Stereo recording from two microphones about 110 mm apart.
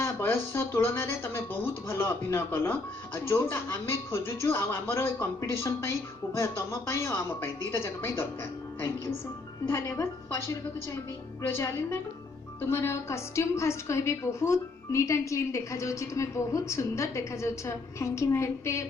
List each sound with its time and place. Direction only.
0.0 s a woman's voice: 25° left (ahead or behind)
9.6 s a woman's voice: 20° left (ahead or behind)